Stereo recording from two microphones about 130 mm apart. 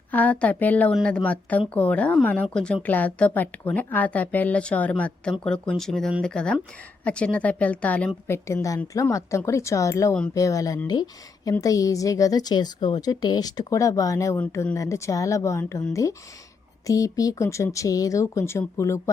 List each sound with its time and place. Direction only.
0.1 s speech: 10° left (ahead or behind)
8.4 s a woman's voice: 25° left (ahead or behind)